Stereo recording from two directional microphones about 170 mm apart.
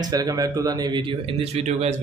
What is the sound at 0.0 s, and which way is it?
Speech, 25° right (ahead or behind).